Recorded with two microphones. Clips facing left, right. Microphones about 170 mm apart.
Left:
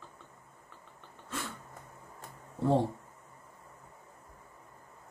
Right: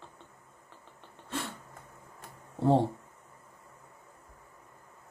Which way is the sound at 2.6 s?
25° right (ahead or behind).